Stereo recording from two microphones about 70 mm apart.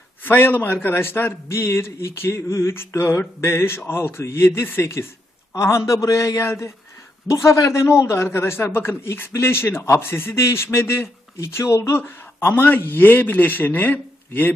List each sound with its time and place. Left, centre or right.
0.2 s a man's voice: left